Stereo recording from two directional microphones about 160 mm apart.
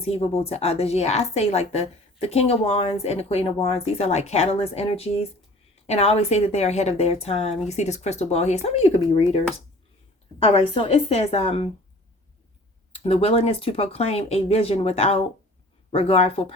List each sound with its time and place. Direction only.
0.0 s speech: 40° left (ahead or behind)
10.4 s speech: 40° left (ahead or behind)
12.9 s speech: 40° left (ahead or behind)